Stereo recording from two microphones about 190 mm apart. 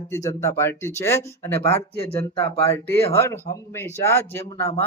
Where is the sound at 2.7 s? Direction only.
15° left (ahead or behind).